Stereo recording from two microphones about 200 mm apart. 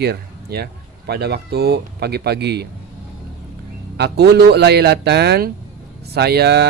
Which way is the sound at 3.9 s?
55° right (ahead or behind).